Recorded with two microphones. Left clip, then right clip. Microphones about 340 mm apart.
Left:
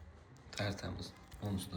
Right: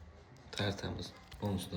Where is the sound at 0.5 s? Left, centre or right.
Centre.